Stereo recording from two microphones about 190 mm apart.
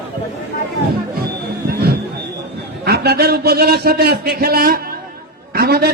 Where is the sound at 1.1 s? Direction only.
55° right (ahead or behind).